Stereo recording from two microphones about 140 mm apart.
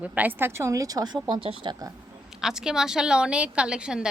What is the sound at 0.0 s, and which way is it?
Speech, 10° right (ahead or behind).